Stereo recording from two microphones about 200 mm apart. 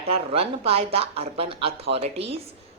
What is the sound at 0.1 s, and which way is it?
A woman's voice, 30° right (ahead or behind).